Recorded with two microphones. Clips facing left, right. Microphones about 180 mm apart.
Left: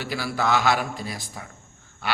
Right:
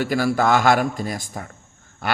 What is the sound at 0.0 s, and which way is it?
A man's voice, 45° right (ahead or behind).